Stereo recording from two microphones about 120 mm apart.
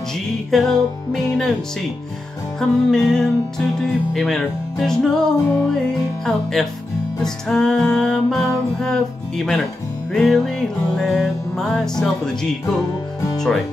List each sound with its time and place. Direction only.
0.5 s speech: 5° left (ahead or behind)
2.6 s speech: 5° left (ahead or behind)
13.4 s speech: centre (ahead or behind)